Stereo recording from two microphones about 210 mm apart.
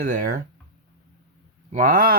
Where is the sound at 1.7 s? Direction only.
40° right (ahead or behind).